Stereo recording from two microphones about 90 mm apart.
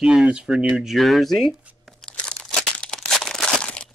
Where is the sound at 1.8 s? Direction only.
5° left (ahead or behind).